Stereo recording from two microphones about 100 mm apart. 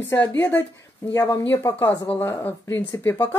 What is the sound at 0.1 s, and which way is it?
Speech, 20° left (ahead or behind).